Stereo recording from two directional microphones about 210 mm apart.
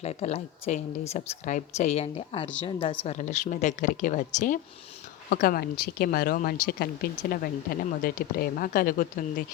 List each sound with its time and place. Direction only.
0.0 s speech: 30° left (ahead or behind)